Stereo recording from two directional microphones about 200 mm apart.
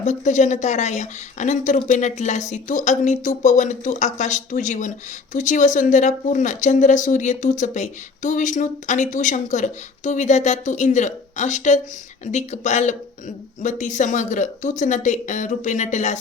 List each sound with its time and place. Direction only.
0.0 s speech: 35° left (ahead or behind)